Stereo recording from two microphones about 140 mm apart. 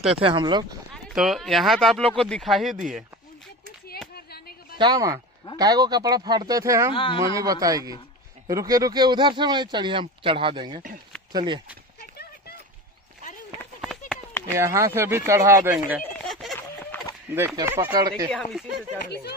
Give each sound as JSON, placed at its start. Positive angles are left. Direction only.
{"t": 0.2, "sound": "speech", "side_deg": -35}
{"t": 1.1, "sound": "speech", "side_deg": 0}
{"t": 4.1, "sound": "a sound", "side_deg": 90}
{"t": 4.7, "sound": "speech", "side_deg": -30}
{"t": 6.9, "sound": "speech", "side_deg": 40}
{"t": 7.3, "sound": "speech", "side_deg": -25}
{"t": 13.7, "sound": "run", "side_deg": 0}
{"t": 14.5, "sound": "speech", "side_deg": -20}
{"t": 16.1, "sound": "a sound", "side_deg": 0}
{"t": 16.5, "sound": "a sound", "side_deg": 10}
{"t": 17.6, "sound": "speech", "side_deg": -20}
{"t": 18.3, "sound": "speech", "side_deg": 0}